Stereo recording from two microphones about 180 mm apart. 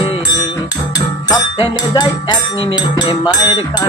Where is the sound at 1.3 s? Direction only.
25° left (ahead or behind).